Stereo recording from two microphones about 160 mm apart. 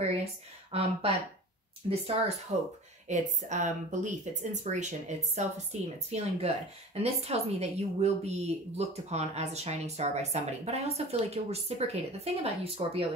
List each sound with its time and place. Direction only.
0.2 s speech: 35° right (ahead or behind)
3.1 s a woman's voice: 50° right (ahead or behind)